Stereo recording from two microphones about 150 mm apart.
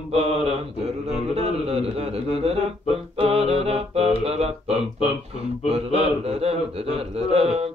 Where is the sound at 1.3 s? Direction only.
40° right (ahead or behind).